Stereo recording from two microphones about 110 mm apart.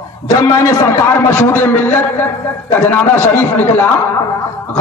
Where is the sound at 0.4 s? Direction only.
25° left (ahead or behind).